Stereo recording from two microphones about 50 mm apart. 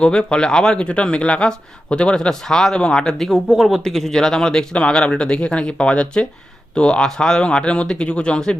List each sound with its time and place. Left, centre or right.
0.0 s speech: centre